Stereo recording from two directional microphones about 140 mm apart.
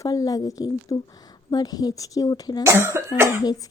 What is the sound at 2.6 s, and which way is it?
Speech, 20° right (ahead or behind).